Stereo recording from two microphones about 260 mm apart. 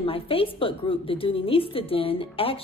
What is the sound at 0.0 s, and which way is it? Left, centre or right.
A woman's voice, left.